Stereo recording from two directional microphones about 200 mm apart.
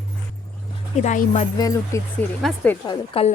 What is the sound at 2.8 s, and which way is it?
Speech, 30° left (ahead or behind).